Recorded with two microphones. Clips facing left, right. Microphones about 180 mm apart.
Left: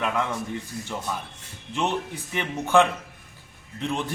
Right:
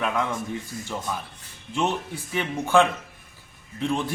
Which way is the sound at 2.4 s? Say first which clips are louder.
Even; 10° right (ahead or behind).